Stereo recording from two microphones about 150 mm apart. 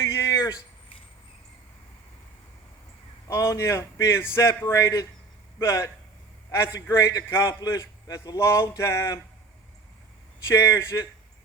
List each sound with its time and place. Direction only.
0.0 s a sound: 20° left (ahead or behind)
3.2 s a man's voice: 15° left (ahead or behind)
10.4 s a man's voice: 20° left (ahead or behind)